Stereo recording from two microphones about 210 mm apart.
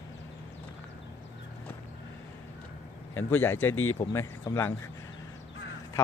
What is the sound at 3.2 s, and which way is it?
Speech, 10° left (ahead or behind).